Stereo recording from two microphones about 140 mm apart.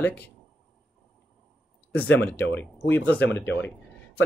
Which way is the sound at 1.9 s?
15° left (ahead or behind).